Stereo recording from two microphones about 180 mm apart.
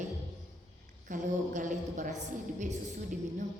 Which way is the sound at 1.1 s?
45° right (ahead or behind).